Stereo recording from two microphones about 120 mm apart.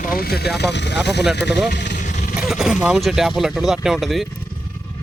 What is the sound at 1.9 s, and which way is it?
Vehicle, 85° left.